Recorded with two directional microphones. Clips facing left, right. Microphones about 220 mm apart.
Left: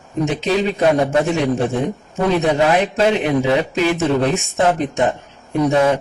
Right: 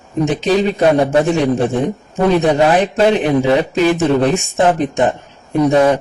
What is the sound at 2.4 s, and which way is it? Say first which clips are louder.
Speech: right 3 dB; 35° right (ahead or behind).